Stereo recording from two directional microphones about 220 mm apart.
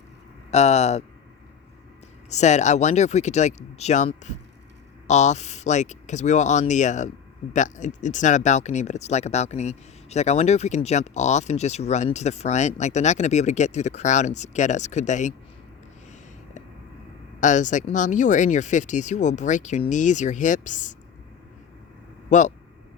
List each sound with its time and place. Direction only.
0.5 s speech: 30° left (ahead or behind)
2.3 s speech: 30° left (ahead or behind)
17.4 s speech: 35° left (ahead or behind)
22.3 s speech: 35° left (ahead or behind)